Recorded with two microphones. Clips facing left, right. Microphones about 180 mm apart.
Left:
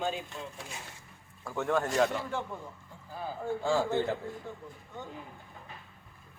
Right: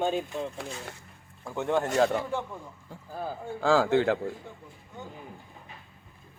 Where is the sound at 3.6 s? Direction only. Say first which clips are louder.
Right 7 dB; 90° right.